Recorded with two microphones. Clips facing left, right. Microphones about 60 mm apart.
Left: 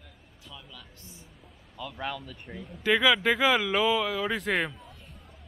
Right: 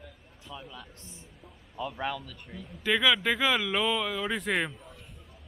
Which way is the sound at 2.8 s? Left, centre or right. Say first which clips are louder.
Left 2 dB; centre.